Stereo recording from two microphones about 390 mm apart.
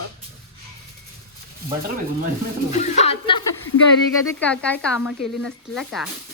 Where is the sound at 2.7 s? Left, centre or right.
Centre.